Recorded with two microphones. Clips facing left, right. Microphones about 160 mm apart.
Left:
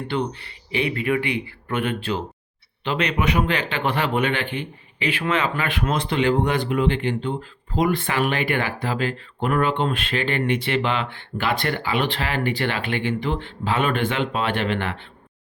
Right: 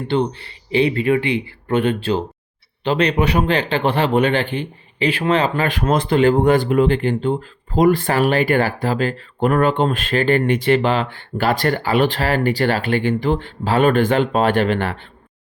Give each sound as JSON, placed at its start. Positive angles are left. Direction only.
{"t": 0.1, "sound": "a man's voice", "side_deg": -30}